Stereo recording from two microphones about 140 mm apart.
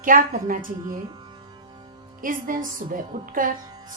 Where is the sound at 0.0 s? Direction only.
75° right (ahead or behind).